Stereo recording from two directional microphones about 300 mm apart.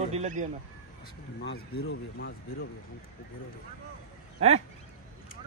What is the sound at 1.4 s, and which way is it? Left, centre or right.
Speech, left.